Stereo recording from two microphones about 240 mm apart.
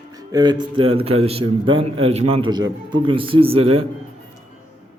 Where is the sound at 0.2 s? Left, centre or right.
Centre.